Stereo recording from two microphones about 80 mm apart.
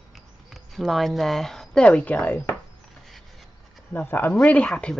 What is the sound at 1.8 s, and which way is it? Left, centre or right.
Speech, centre.